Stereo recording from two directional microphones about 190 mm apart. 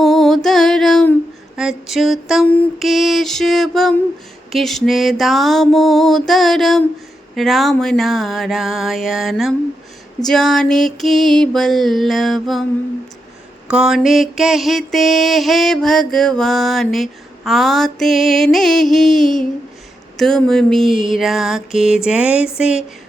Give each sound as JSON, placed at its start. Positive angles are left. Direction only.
{"t": 0.0, "sound": "music", "side_deg": 0}
{"t": 1.5, "sound": "mantra", "side_deg": 0}
{"t": 13.7, "sound": "mantra", "side_deg": -5}